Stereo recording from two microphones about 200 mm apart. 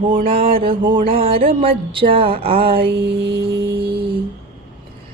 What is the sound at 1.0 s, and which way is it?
Music, 45° right (ahead or behind).